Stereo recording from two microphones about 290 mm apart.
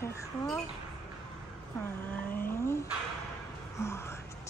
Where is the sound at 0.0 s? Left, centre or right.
Centre.